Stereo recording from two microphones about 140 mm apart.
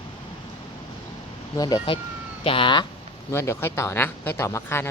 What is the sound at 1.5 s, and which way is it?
Speech, 30° left (ahead or behind).